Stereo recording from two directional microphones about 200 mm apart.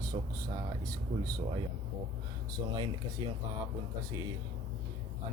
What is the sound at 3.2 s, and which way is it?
Speech, 20° right (ahead or behind).